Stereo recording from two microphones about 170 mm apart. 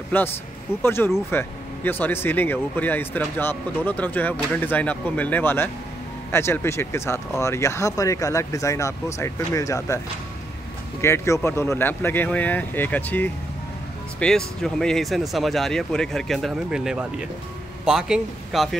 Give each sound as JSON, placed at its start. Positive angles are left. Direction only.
{"t": 0.1, "sound": "speech", "side_deg": 10}
{"t": 11.0, "sound": "speech", "side_deg": 15}